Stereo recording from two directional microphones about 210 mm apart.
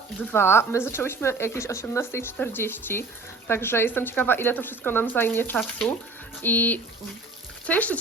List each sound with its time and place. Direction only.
0.3 s speech: 10° left (ahead or behind)